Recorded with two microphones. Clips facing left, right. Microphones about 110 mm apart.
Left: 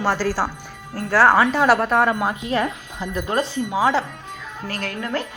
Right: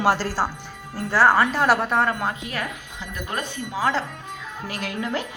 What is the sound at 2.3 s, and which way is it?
Speech, 25° left (ahead or behind).